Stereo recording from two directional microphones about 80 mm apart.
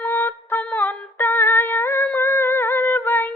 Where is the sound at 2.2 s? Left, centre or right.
Left.